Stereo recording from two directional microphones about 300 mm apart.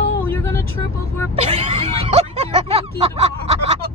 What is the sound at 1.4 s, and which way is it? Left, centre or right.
Speech, centre.